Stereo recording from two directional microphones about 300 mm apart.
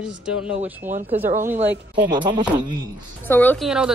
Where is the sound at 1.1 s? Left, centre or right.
Centre.